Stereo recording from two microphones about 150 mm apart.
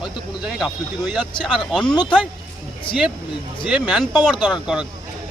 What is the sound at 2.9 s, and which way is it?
Speech, 35° left (ahead or behind).